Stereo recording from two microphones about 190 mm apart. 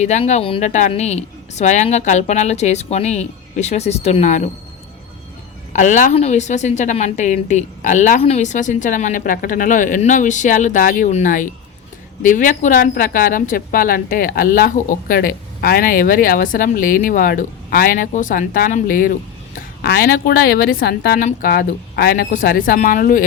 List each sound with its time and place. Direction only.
0.0 s a woman's voice: 35° left (ahead or behind)
5.7 s a woman's voice: 40° left (ahead or behind)